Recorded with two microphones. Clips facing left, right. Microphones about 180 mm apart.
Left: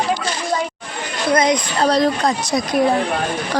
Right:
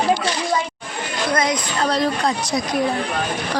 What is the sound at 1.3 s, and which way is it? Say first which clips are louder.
Speech: left 5 dB; 20° left (ahead or behind).